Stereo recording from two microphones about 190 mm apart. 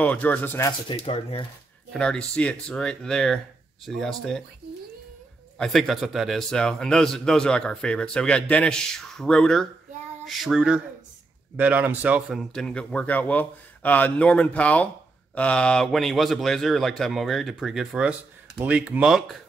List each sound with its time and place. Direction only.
0.0 s speech: 10° left (ahead or behind)
0.8 s speech: 30° left (ahead or behind)
1.9 s a man's voice: 5° left (ahead or behind)
5.6 s a man's voice: centre (ahead or behind)